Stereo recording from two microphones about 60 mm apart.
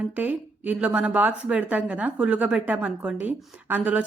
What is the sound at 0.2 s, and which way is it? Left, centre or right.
A woman's voice, right.